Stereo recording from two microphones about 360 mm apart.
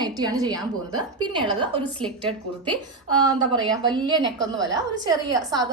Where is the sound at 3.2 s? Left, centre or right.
Centre.